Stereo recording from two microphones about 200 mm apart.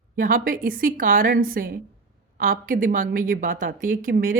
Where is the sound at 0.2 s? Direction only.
45° right (ahead or behind).